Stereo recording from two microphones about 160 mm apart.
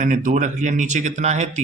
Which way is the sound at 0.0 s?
55° right (ahead or behind).